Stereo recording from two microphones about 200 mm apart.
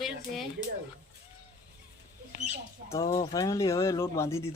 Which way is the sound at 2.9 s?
25° left (ahead or behind).